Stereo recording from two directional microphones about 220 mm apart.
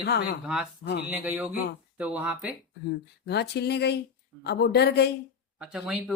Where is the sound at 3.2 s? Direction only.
50° left (ahead or behind).